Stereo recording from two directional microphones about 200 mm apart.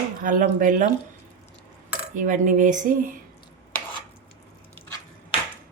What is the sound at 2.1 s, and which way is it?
Speech, 40° right (ahead or behind).